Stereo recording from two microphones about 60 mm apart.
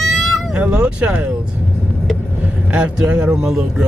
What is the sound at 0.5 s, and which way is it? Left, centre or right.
Speech, centre.